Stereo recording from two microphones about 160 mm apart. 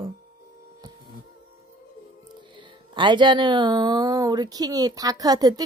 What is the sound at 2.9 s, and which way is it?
Speech, 30° right (ahead or behind).